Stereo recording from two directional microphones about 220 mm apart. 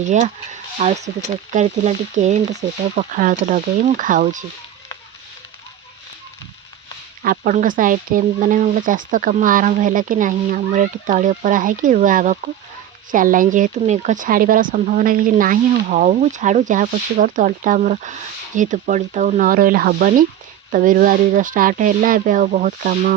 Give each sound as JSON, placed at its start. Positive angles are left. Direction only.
{"t": 0.0, "sound": "speech", "side_deg": -35}
{"t": 7.2, "sound": "speech", "side_deg": -40}